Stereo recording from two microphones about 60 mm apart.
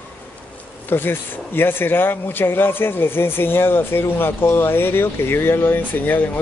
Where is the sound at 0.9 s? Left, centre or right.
Left.